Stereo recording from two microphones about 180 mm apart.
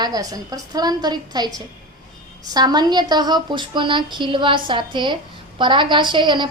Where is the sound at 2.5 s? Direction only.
20° right (ahead or behind).